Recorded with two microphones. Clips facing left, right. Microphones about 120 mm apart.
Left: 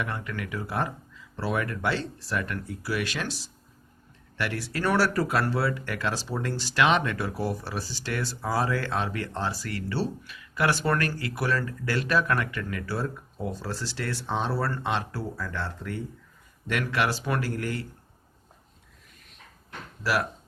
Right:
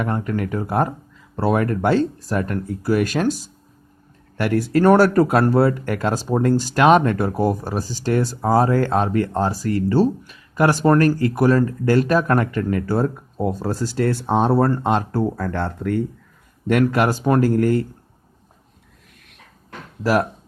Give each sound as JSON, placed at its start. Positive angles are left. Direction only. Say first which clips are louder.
{"t": 0.0, "sound": "speech", "louder": "right 10 dB", "side_deg": -40}
{"t": 20.0, "sound": "speech", "louder": "right 8 dB", "side_deg": -45}